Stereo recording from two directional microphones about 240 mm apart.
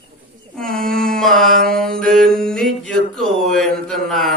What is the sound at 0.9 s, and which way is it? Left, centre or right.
Mantra, centre.